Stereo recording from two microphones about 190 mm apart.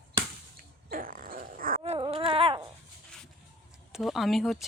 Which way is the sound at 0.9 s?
45° right (ahead or behind).